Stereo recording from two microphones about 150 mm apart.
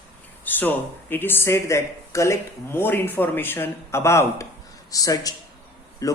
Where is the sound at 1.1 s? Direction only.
15° left (ahead or behind).